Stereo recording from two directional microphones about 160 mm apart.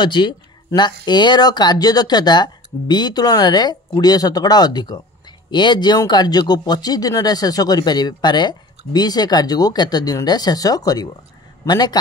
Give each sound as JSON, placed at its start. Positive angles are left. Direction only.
{"t": 0.0, "sound": "speech", "side_deg": 30}